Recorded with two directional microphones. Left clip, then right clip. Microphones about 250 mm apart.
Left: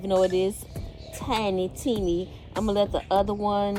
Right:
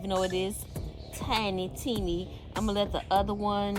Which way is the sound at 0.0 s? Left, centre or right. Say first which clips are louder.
Left 7 dB; centre.